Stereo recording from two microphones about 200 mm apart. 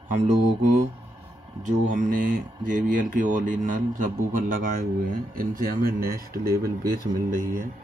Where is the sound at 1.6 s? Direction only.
40° right (ahead or behind).